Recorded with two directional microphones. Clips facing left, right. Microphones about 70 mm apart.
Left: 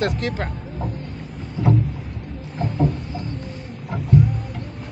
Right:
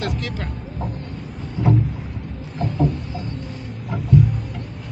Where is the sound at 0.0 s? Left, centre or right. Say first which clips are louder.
Left 4 dB; left.